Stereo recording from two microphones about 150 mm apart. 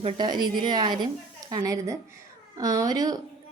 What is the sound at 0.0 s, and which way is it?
A woman's voice, 30° right (ahead or behind).